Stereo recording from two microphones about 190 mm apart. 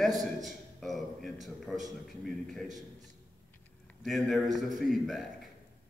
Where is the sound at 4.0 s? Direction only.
Centre (ahead or behind).